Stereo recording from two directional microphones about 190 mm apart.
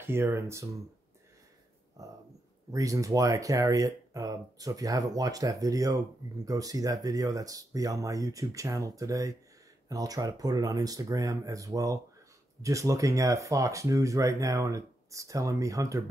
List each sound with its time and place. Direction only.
0.0 s speech: 15° right (ahead or behind)
2.0 s speech: 20° right (ahead or behind)